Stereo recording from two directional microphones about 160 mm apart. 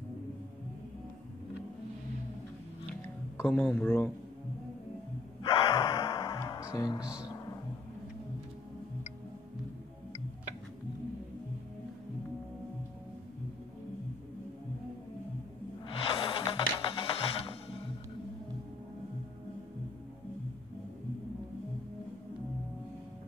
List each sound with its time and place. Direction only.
2.9 s music: 10° left (ahead or behind)
5.5 s music: 25° left (ahead or behind)
7.0 s speech: 5° right (ahead or behind)
15.9 s music: 35° left (ahead or behind)